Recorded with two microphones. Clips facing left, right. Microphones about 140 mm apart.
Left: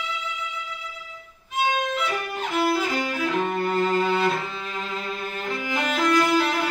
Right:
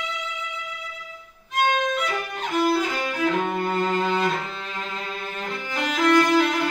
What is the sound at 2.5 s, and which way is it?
Music, 5° left (ahead or behind).